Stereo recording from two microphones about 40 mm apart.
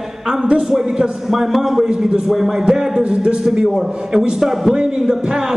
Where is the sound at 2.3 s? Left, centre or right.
Centre.